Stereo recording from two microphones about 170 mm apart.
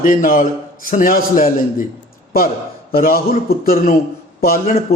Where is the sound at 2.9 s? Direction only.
60° left (ahead or behind).